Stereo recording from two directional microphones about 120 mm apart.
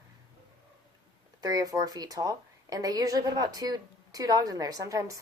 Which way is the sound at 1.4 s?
30° right (ahead or behind).